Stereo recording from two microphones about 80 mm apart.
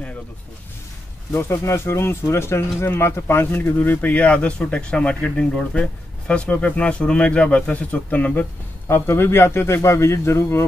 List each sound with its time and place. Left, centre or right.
1.5 s speech: left; by 8.5 s centre
8.8 s a man's voice: left